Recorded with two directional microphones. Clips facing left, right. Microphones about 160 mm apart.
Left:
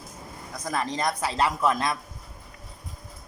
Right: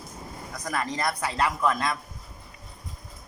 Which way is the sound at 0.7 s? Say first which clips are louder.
Left 1 dB; 20° left (ahead or behind).